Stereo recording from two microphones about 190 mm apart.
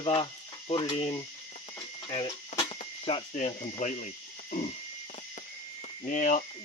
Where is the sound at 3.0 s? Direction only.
30° left (ahead or behind).